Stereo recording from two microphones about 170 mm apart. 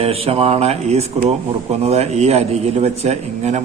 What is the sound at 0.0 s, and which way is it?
A man's voice, 35° right (ahead or behind).